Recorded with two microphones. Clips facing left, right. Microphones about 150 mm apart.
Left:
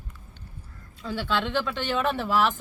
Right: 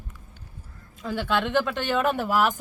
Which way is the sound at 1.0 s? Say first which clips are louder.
Right 2 dB; 15° right (ahead or behind).